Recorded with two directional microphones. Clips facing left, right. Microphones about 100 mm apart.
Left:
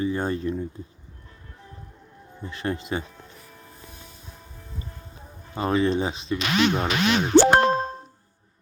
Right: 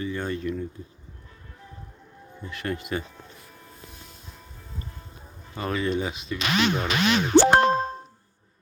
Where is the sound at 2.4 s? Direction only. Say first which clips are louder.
Left 2 dB; 30° left (ahead or behind).